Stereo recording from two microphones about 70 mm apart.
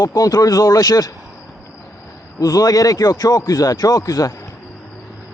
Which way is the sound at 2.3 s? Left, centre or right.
Left.